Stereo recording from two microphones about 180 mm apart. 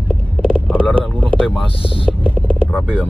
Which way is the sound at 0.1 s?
5° right (ahead or behind).